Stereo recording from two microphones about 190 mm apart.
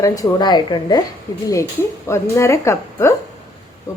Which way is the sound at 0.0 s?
20° left (ahead or behind).